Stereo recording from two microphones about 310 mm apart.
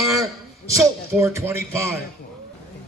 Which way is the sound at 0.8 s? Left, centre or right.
Centre.